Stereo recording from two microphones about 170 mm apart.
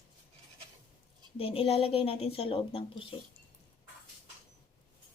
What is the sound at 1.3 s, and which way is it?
A woman's voice, 35° left (ahead or behind).